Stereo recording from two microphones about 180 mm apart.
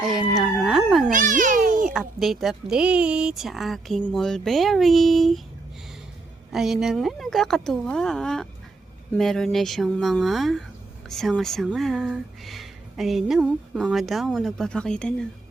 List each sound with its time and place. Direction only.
0.0 s howl: centre (ahead or behind)
1.1 s a sound: 45° right (ahead or behind)
1.9 s speech: centre (ahead or behind)
6.5 s speech: centre (ahead or behind)